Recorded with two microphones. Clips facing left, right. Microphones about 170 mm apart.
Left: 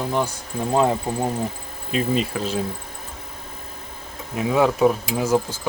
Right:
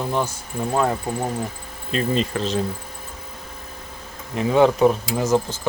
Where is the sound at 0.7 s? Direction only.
20° left (ahead or behind).